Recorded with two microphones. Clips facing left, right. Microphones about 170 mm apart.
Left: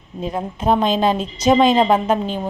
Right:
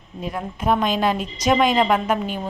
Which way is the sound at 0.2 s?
25° left (ahead or behind).